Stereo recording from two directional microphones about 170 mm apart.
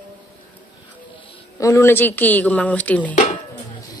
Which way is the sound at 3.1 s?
35° left (ahead or behind).